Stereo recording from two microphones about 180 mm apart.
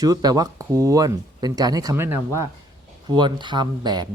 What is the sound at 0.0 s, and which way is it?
Speech, 20° right (ahead or behind).